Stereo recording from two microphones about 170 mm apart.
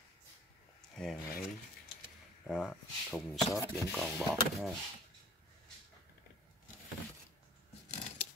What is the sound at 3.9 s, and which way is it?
Speech, centre (ahead or behind).